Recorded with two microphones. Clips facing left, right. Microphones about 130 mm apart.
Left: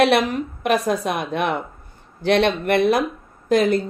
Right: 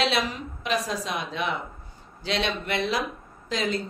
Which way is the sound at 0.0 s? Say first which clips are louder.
Left 9 dB; 55° left (ahead or behind).